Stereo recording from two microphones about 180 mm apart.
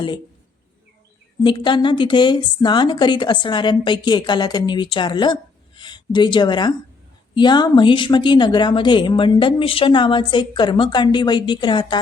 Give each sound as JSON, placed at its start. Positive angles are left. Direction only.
{"t": 1.5, "sound": "speech", "side_deg": 25}